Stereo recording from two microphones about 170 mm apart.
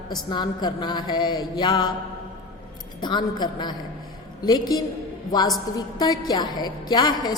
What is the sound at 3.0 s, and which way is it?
A woman's voice, 25° left (ahead or behind).